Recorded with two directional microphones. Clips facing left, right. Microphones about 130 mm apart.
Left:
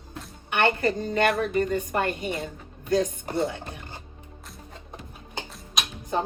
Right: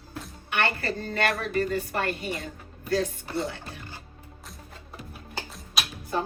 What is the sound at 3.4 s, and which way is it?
Music, 20° left (ahead or behind).